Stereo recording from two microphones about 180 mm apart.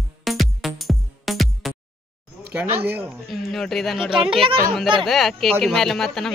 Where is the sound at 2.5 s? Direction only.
10° right (ahead or behind).